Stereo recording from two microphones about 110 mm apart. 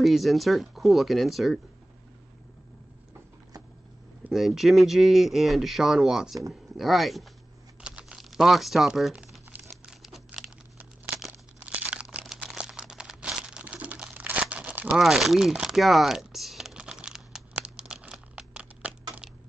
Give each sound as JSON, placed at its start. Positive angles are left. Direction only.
{"t": 0.0, "sound": "speech", "side_deg": 0}
{"t": 4.3, "sound": "speech", "side_deg": 0}
{"t": 7.8, "sound": "crumpling", "side_deg": -10}
{"t": 11.6, "sound": "crumpling", "side_deg": -15}
{"t": 15.0, "sound": "crumpling", "side_deg": 0}